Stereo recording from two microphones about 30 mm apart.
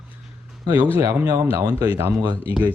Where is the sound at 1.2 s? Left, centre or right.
Right.